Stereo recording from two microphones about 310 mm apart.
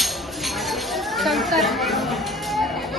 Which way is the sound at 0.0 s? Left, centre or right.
Centre.